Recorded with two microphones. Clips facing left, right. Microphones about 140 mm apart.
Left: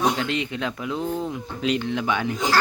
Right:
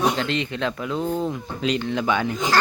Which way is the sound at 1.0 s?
20° right (ahead or behind).